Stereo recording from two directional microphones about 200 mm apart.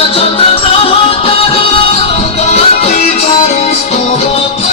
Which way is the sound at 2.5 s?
35° left (ahead or behind).